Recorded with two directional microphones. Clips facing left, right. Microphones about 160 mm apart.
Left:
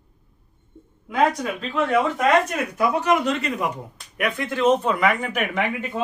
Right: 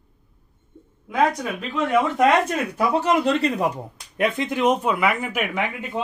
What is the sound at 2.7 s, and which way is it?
Speech, 30° right (ahead or behind).